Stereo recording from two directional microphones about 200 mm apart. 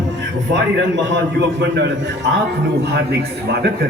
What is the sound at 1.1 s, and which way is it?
A man's voice, 65° right (ahead or behind).